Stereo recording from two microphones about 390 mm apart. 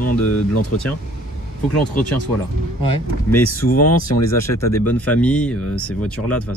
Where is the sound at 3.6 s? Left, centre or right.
Left.